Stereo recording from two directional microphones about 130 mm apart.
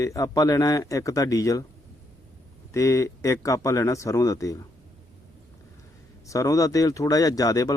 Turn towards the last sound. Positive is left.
turn(degrees=25)  # may be behind; listen again after turning